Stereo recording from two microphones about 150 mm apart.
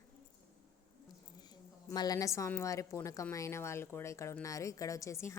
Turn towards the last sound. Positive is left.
turn(degrees=20)  # may be behind; listen again after turning